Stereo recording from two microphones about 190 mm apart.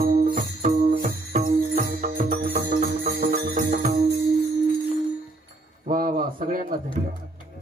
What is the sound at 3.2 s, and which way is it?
Music, 55° right (ahead or behind).